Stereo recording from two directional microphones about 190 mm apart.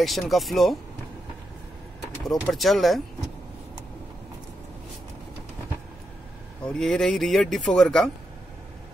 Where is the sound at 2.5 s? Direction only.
Centre (ahead or behind).